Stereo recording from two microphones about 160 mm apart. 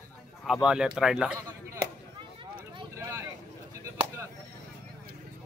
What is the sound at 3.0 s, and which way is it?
Vehicle, 20° right (ahead or behind).